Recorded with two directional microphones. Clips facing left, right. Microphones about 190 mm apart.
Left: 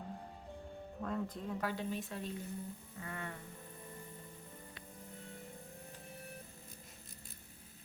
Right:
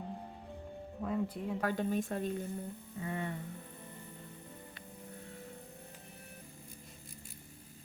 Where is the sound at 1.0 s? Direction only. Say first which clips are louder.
Right 4 dB; 10° right (ahead or behind).